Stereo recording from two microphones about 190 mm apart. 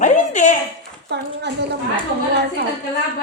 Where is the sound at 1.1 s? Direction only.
60° right (ahead or behind).